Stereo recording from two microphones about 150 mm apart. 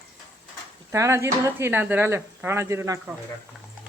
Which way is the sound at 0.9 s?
20° right (ahead or behind).